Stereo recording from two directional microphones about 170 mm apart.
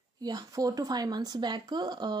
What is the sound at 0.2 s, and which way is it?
Speech, 20° right (ahead or behind).